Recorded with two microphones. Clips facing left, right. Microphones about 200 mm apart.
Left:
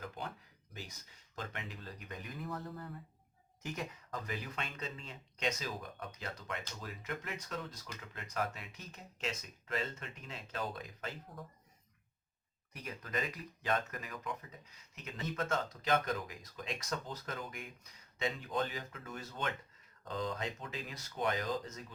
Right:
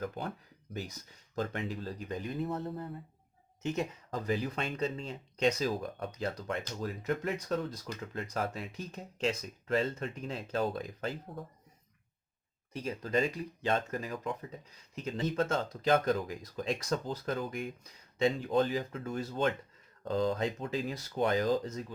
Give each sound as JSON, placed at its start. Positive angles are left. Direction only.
{"t": 1.4, "sound": "speech", "side_deg": -35}
{"t": 12.7, "sound": "speech", "side_deg": -30}